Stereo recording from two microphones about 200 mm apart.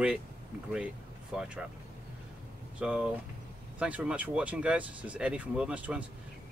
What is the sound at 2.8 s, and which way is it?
Speech, 5° right (ahead or behind).